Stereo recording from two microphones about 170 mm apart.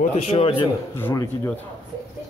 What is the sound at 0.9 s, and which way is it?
Speech, 15° left (ahead or behind).